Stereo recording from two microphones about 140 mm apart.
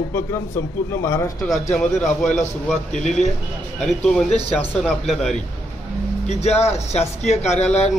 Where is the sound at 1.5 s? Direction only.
55° left (ahead or behind).